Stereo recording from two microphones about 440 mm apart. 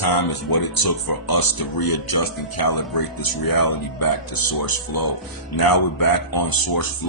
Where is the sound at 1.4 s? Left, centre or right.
Left.